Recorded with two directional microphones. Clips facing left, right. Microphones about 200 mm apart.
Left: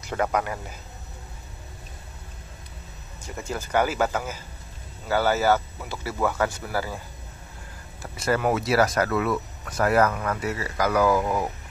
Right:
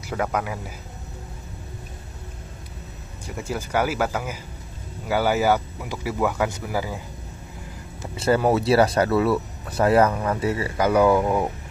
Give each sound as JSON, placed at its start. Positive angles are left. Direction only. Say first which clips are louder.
{"t": 0.0, "sound": "a man's voice", "louder": "even", "side_deg": -5}
{"t": 3.3, "sound": "speech", "louder": "even", "side_deg": -10}
{"t": 8.0, "sound": "speech", "louder": "right 4 dB", "side_deg": -30}